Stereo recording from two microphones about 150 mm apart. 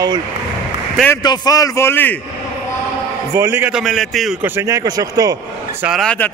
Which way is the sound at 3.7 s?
Centre (ahead or behind).